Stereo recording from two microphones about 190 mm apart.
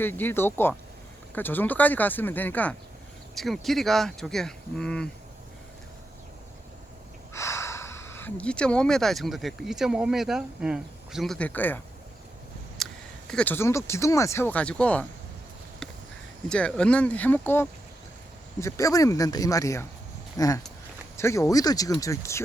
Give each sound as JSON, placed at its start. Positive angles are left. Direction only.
{"t": 0.0, "sound": "speech", "side_deg": 10}
{"t": 7.3, "sound": "speech", "side_deg": 15}
{"t": 16.5, "sound": "speech", "side_deg": 5}